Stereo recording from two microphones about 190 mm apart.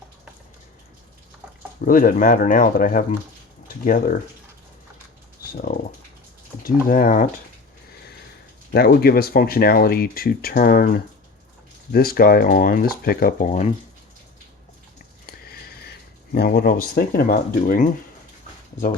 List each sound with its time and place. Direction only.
1.8 s speech: 45° left (ahead or behind)
5.5 s speech: 50° left (ahead or behind)
8.7 s speech: 55° left (ahead or behind); by 13.7 s 40° left (ahead or behind)
15.3 s sniff: 55° left (ahead or behind)
16.3 s speech: 55° left (ahead or behind)